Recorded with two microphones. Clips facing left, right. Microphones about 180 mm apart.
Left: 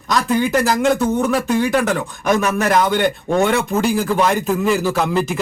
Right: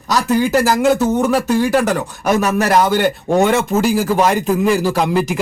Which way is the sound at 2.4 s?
40° right (ahead or behind).